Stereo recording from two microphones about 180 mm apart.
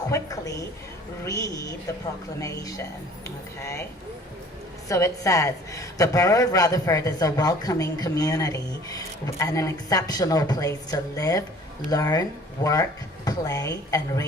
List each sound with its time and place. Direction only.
0.1 s a woman's voice: 20° left (ahead or behind)
4.9 s a woman's voice: 15° left (ahead or behind)